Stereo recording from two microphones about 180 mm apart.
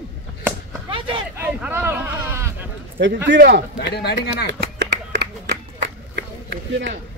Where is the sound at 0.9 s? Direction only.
30° right (ahead or behind).